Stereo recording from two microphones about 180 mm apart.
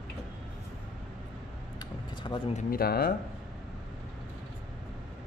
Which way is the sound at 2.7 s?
60° left (ahead or behind).